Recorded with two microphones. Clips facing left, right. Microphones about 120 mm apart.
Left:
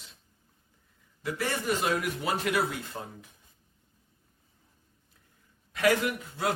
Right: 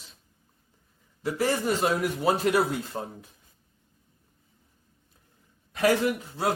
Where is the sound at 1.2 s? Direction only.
25° right (ahead or behind).